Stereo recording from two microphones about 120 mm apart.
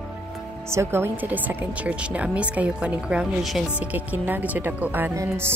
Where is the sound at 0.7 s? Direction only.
20° right (ahead or behind).